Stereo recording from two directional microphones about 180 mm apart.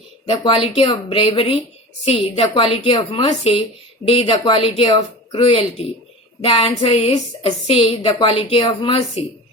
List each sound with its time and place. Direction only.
0.4 s a woman's voice: 30° left (ahead or behind)